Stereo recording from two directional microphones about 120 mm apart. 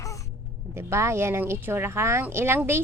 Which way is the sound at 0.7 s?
20° right (ahead or behind).